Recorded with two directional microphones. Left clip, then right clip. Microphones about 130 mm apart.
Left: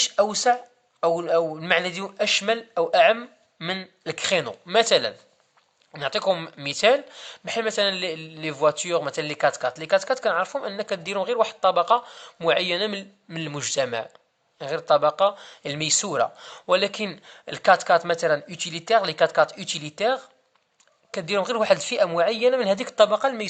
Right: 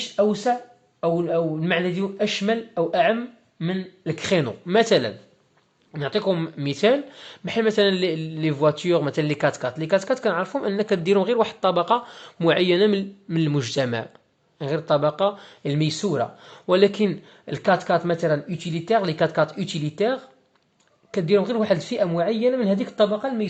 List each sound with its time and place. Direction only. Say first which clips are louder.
0.2 s speech: right 1 dB; 25° left (ahead or behind)
5.9 s speech: even; 25° left (ahead or behind); by 23.5 s 45° left (ahead or behind)